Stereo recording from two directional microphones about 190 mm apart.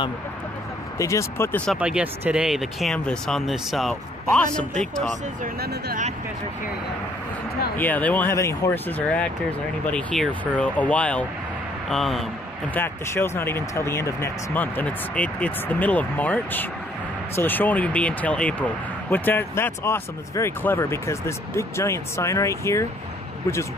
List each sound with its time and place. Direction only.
0.9 s speech: 15° left (ahead or behind)
1.7 s speech: 5° right (ahead or behind)
5.4 s speech: 55° right (ahead or behind)
7.7 s speech: 10° left (ahead or behind)
12.7 s speech: 10° left (ahead or behind)